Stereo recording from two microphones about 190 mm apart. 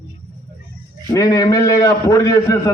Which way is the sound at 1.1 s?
20° left (ahead or behind).